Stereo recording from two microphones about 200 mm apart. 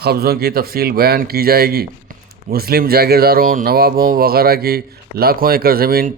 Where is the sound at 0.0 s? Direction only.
50° right (ahead or behind).